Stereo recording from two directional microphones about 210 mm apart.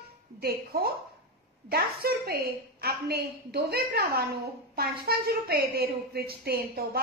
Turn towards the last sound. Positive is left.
turn(degrees=-45)  # may be behind; listen again after turning